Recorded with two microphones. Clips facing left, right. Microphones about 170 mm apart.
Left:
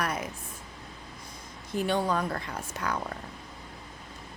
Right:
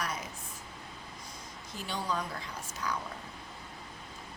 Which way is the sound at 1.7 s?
55° left (ahead or behind).